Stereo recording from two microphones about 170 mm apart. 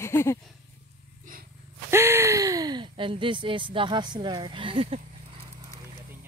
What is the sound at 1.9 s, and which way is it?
Speech, 15° right (ahead or behind).